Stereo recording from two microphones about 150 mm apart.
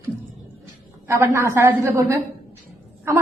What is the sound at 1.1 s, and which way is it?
A woman's voice, 15° right (ahead or behind).